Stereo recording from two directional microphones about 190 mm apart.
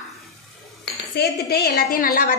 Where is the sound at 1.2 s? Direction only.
55° left (ahead or behind).